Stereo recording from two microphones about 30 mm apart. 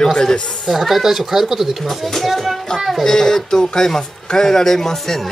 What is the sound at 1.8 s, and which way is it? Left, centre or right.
Speech, centre.